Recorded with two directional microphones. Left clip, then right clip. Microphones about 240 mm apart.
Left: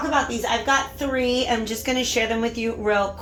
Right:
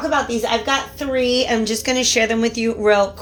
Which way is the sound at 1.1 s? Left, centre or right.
Right.